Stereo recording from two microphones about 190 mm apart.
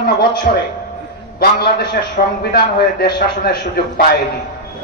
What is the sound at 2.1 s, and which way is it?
A man's voice, 55° left (ahead or behind).